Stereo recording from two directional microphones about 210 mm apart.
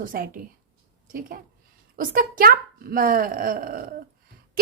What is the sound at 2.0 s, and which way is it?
A woman's voice, 40° right (ahead or behind).